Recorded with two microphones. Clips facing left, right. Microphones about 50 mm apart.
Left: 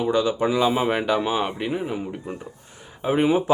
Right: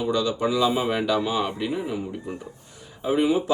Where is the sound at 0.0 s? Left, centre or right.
Left.